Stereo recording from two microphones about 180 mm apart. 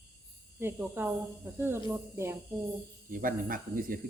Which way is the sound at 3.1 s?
50° right (ahead or behind).